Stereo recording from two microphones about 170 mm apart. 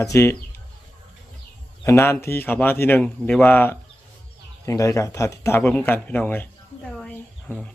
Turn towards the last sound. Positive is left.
turn(degrees=5)  # may be behind; listen again after turning